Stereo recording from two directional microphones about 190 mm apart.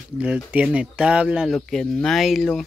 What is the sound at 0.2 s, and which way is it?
Speech, 5° right (ahead or behind).